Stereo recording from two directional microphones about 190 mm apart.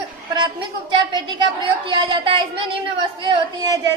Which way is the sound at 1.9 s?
25° right (ahead or behind).